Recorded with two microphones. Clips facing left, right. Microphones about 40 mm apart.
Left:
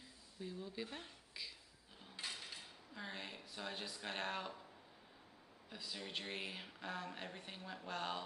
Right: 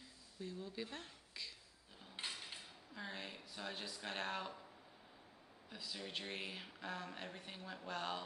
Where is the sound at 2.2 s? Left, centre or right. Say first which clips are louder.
Right 1 dB; right.